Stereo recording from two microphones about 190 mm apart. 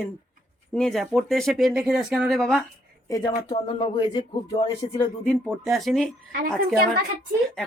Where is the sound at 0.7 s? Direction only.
Centre (ahead or behind).